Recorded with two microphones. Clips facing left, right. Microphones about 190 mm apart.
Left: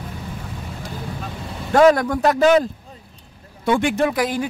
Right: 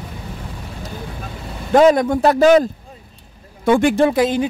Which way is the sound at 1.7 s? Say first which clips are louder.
Right 2 dB; 20° right (ahead or behind).